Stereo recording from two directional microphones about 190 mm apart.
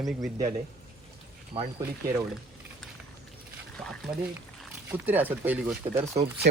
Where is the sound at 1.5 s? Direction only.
30° right (ahead or behind).